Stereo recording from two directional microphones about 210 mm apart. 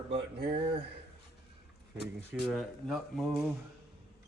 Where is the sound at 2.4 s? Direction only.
Centre (ahead or behind).